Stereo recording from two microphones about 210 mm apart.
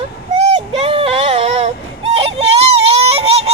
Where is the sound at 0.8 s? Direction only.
30° right (ahead or behind).